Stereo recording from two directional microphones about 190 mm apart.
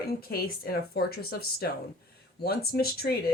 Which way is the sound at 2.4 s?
55° left (ahead or behind).